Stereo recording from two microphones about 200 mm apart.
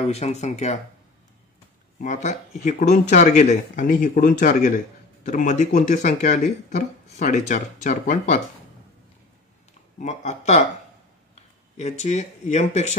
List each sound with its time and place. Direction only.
0.0 s speech: 35° left (ahead or behind)
2.0 s speech: 35° left (ahead or behind)
9.9 s speech: 35° left (ahead or behind)